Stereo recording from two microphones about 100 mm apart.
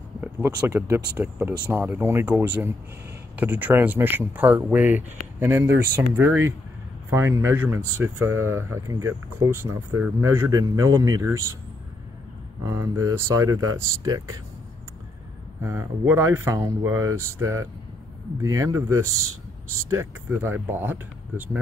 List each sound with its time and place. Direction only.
0.2 s speech: 20° right (ahead or behind)
11.0 s speech: 45° right (ahead or behind)
12.6 s speech: 30° right (ahead or behind)
15.6 s speech: 25° right (ahead or behind)